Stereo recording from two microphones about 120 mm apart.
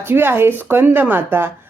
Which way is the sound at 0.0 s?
20° right (ahead or behind).